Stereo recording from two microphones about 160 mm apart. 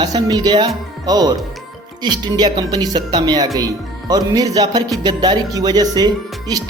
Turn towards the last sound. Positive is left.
turn(degrees=-25)  # may be behind; listen again after turning